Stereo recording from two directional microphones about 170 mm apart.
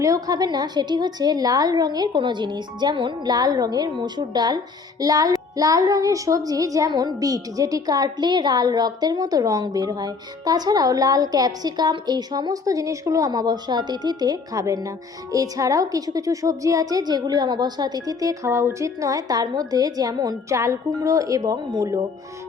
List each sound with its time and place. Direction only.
0.0 s a woman's voice: 20° right (ahead or behind)